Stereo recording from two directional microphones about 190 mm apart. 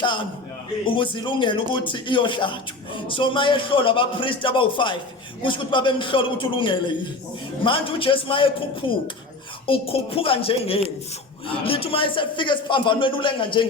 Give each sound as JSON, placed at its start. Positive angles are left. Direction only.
{"t": 0.0, "sound": "a man's voice", "side_deg": 25}